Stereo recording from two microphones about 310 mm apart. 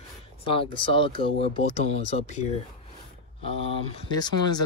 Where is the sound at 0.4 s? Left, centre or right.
Centre.